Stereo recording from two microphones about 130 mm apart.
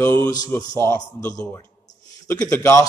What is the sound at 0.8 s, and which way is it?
A man's voice, 20° left (ahead or behind).